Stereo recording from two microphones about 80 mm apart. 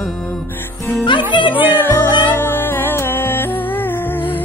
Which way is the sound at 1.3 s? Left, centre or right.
Left.